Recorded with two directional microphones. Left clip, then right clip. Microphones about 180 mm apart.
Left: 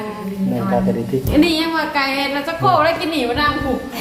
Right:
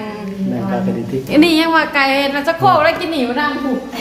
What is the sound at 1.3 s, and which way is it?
Speech, 25° right (ahead or behind).